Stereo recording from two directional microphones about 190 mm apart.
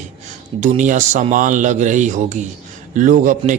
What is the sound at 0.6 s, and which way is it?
A man's voice, 40° right (ahead or behind).